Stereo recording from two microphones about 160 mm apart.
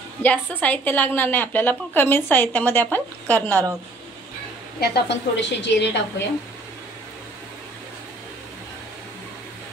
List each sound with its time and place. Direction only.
0.2 s a woman's voice: 10° left (ahead or behind)
4.7 s a woman's voice: 90° left